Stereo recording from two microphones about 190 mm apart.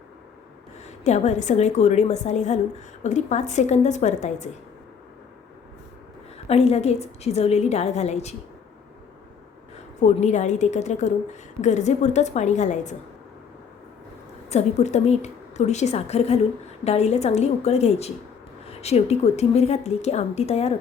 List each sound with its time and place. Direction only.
0.9 s a woman's voice: 35° left (ahead or behind)
6.5 s a woman's voice: 35° left (ahead or behind)
10.0 s a woman's voice: 40° left (ahead or behind)
14.5 s a woman's voice: 35° left (ahead or behind)